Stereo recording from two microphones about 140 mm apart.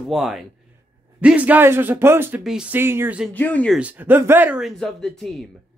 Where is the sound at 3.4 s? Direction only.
10° left (ahead or behind).